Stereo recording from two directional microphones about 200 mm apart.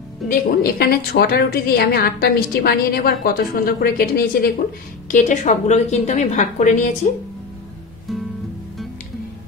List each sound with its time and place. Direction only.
0.3 s a woman's voice: 50° left (ahead or behind)
8.1 s music: centre (ahead or behind)